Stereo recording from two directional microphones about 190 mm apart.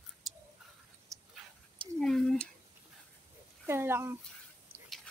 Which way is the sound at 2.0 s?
Centre (ahead or behind).